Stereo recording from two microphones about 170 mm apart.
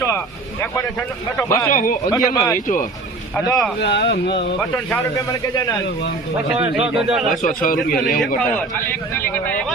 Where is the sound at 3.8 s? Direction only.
85° left.